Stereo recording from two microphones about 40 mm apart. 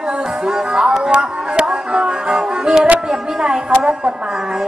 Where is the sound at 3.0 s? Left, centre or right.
Centre.